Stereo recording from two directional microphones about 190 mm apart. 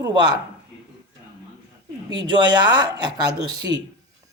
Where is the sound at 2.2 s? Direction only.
25° right (ahead or behind).